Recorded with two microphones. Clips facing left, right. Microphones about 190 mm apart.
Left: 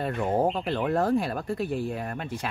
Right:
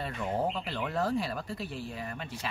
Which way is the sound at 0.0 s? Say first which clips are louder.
Left 7 dB; 50° left (ahead or behind).